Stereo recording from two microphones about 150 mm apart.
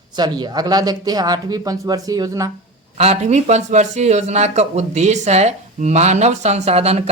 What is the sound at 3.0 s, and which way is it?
Speech, 45° right (ahead or behind).